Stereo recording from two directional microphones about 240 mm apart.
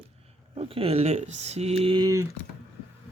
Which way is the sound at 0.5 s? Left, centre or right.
Right.